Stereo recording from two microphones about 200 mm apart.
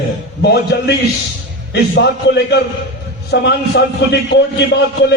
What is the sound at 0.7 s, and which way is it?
A man's voice, 55° left (ahead or behind).